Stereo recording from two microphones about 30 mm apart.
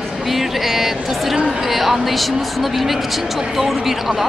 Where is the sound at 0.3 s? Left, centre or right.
Centre.